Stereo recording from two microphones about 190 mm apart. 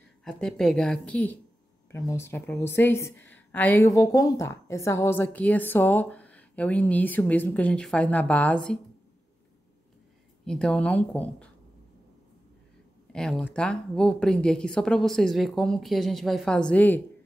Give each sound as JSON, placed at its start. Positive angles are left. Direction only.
{"t": 0.2, "sound": "a woman's voice", "side_deg": 0}
{"t": 10.4, "sound": "a woman's voice", "side_deg": 5}
{"t": 13.1, "sound": "a woman's voice", "side_deg": 5}